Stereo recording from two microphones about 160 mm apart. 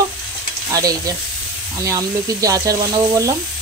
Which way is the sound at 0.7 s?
20° right (ahead or behind).